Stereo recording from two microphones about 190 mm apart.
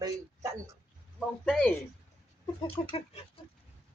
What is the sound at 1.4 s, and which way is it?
Speech, 5° left (ahead or behind).